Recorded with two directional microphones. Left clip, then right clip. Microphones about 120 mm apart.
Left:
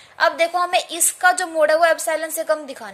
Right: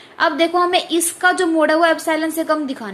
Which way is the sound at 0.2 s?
45° left (ahead or behind).